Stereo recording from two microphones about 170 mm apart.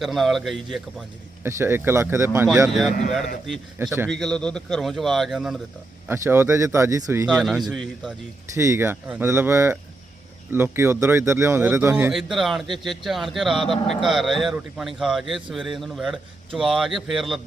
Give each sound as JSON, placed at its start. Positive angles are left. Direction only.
{"t": 0.0, "sound": "speech", "side_deg": 0}
{"t": 1.5, "sound": "a man's voice", "side_deg": -15}
{"t": 4.1, "sound": "speech", "side_deg": 0}
{"t": 6.1, "sound": "a man's voice", "side_deg": -15}
{"t": 7.3, "sound": "speech", "side_deg": -5}
{"t": 8.5, "sound": "a man's voice", "side_deg": -15}